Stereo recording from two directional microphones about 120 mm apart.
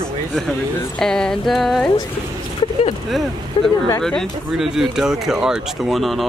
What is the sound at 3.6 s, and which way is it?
Speech, 45° left (ahead or behind).